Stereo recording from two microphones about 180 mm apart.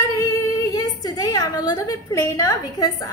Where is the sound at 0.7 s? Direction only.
20° left (ahead or behind).